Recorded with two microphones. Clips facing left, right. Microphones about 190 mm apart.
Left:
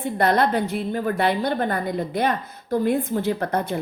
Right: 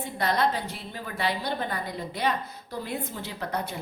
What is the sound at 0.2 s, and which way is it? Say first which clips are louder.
A woman's voice: left 6 dB; 55° left (ahead or behind).